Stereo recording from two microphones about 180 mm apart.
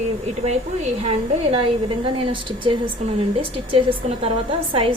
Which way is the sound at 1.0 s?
30° right (ahead or behind).